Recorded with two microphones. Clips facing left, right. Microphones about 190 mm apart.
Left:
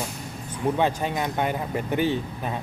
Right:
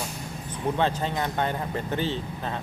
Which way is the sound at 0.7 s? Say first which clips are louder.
Even; 15° left (ahead or behind).